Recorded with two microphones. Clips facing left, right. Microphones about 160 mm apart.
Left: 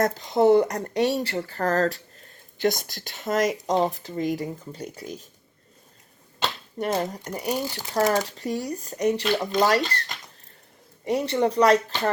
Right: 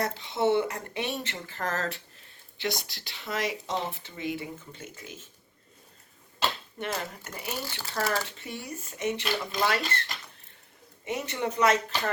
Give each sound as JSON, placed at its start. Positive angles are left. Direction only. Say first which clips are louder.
{"t": 0.0, "sound": "speech", "louder": "left 7 dB", "side_deg": 40}
{"t": 6.7, "sound": "speech", "louder": "left 8 dB", "side_deg": 40}
{"t": 11.0, "sound": "speech", "louder": "left 9 dB", "side_deg": 35}